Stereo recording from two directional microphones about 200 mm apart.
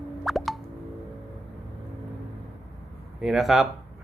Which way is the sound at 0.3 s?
Centre (ahead or behind).